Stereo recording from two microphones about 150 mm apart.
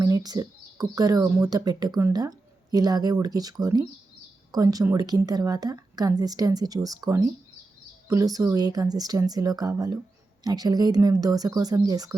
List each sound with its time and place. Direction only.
0.0 s speech: 25° right (ahead or behind)